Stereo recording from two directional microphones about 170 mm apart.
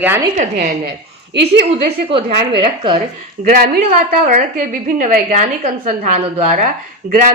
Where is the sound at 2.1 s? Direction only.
30° right (ahead or behind).